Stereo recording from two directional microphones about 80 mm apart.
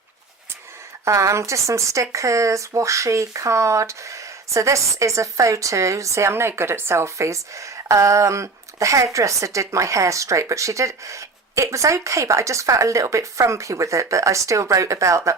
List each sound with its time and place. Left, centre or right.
1.0 s speech: right